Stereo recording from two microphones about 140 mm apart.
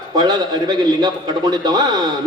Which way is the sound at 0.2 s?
30° right (ahead or behind).